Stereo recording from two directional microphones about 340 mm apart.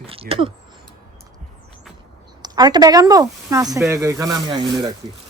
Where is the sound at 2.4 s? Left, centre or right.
Centre.